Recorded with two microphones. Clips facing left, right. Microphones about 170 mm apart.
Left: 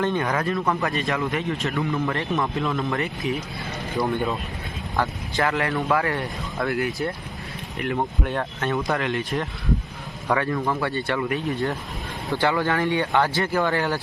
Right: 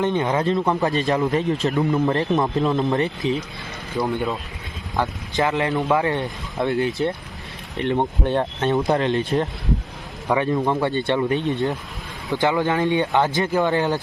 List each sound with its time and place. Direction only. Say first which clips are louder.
0.0 s speech: right 3 dB; 20° right (ahead or behind)
3.9 s speech: right 1 dB; centre (ahead or behind)
4.9 s speech: right 2 dB; 20° right (ahead or behind)
10.2 s speech: right 3 dB; 20° right (ahead or behind)